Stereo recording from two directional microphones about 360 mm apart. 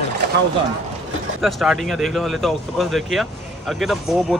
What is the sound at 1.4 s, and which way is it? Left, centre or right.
Speech, centre.